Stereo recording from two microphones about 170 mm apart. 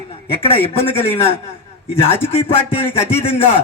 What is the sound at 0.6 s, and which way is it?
A man's voice, 35° left (ahead or behind).